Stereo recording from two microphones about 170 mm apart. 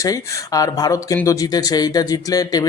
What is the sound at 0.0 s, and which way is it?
Speech, 20° left (ahead or behind).